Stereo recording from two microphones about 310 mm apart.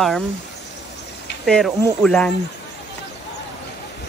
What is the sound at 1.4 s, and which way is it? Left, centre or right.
Speech, centre.